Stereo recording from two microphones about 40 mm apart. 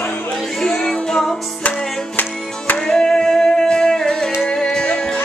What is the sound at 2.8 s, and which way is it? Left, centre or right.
Music, centre.